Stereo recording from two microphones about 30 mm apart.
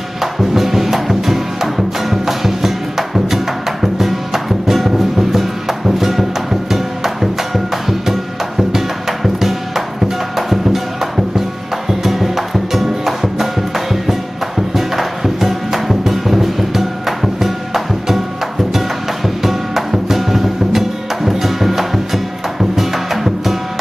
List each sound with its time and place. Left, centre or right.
0.2 s music: centre